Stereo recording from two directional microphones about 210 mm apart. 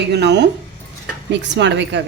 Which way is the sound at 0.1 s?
55° right (ahead or behind).